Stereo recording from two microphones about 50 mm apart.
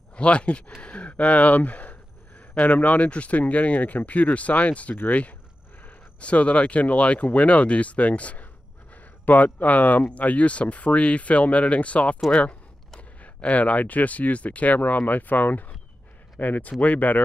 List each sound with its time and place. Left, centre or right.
0.1 s speech: left
6.2 s speech: left